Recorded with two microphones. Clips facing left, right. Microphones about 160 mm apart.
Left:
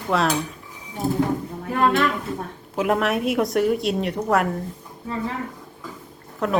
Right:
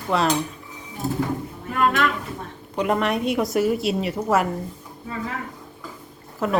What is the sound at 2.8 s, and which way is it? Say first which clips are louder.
Speech: left 1 dB; centre (ahead or behind).